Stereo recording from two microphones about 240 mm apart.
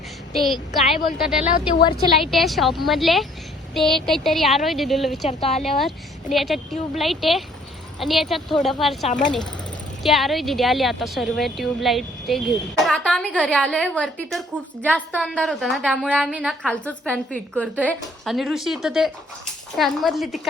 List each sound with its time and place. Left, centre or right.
0.4 s a woman's voice: centre
1.4 s speech: left
2.2 s a woman's voice: centre
5.3 s speech: left
5.6 s a woman's voice: centre